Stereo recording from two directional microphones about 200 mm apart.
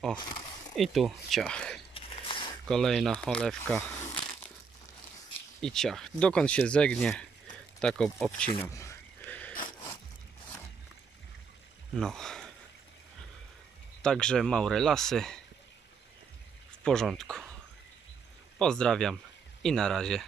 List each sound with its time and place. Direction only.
0.2 s a sound: 25° left (ahead or behind)
0.7 s speech: centre (ahead or behind)
2.0 s a sound: 25° left (ahead or behind)
2.7 s speech: centre (ahead or behind)
5.6 s speech: centre (ahead or behind)
8.5 s a sound: 15° left (ahead or behind)
11.9 s speech: centre (ahead or behind)
14.0 s speech: 5° left (ahead or behind)
16.8 s speech: centre (ahead or behind)
18.6 s speech: 5° left (ahead or behind)